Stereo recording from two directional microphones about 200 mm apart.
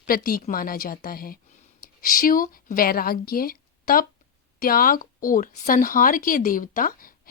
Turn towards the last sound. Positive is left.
turn(degrees=45)  # may be behind; listen again after turning